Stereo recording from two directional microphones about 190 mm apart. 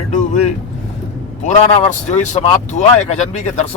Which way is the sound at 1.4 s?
35° left (ahead or behind).